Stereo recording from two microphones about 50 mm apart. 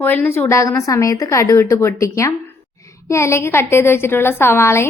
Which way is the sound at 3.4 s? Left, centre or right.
Left.